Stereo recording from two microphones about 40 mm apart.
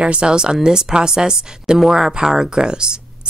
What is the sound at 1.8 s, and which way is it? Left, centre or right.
Speech, centre.